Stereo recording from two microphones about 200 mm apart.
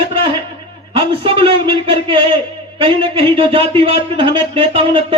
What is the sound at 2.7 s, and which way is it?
Speech, 25° right (ahead or behind).